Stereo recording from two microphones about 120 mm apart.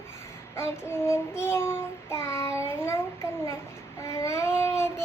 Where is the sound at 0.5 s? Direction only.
20° left (ahead or behind).